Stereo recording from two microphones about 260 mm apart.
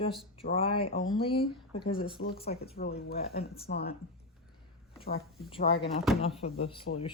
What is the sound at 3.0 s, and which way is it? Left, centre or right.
Speech, left.